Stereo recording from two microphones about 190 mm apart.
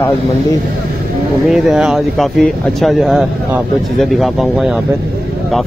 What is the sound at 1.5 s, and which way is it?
Speech, centre (ahead or behind).